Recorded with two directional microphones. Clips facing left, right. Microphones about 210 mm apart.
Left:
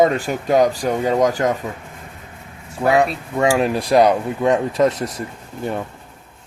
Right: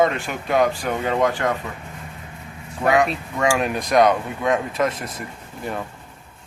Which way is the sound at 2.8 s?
30° left (ahead or behind).